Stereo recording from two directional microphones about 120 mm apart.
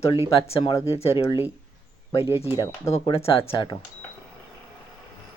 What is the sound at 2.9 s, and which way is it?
Speech, 55° left (ahead or behind).